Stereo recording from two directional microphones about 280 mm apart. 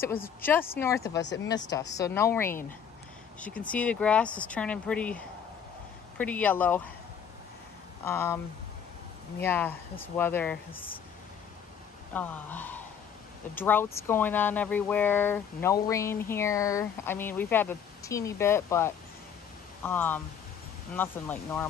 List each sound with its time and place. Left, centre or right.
0.4 s speech: centre
1.2 s speech: left
1.8 s speech: centre
8.0 s speech: centre
9.4 s speech: centre
12.1 s speech: centre